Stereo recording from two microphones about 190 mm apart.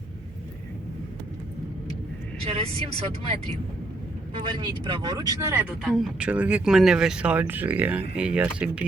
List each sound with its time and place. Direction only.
2.4 s speech: 30° right (ahead or behind)
4.5 s speech: 25° right (ahead or behind)
5.8 s speech: 5° right (ahead or behind)